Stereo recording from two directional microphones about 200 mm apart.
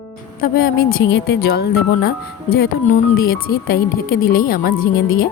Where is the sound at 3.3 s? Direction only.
50° left (ahead or behind).